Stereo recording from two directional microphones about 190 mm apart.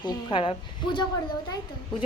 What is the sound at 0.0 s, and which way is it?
A woman's voice, 25° left (ahead or behind).